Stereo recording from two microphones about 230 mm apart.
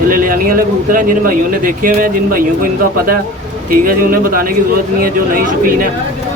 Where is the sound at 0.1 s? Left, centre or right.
Right.